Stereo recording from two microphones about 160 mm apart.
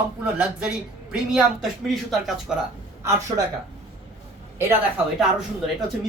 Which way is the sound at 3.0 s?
20° right (ahead or behind).